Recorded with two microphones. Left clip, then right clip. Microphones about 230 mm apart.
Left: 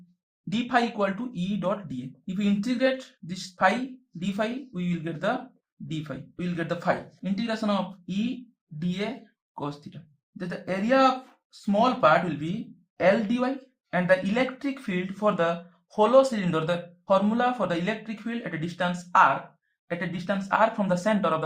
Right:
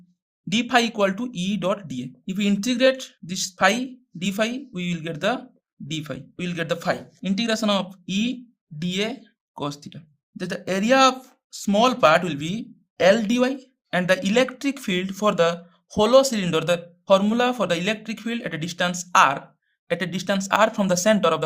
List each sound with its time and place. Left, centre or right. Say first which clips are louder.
0.5 s speech: right 5 dB; right